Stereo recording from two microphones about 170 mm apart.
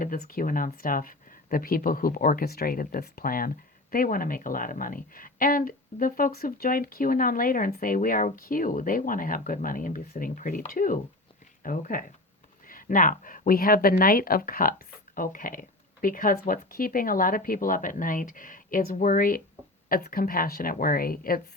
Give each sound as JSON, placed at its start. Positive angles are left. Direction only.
{"t": 0.0, "sound": "a woman's voice", "side_deg": 55}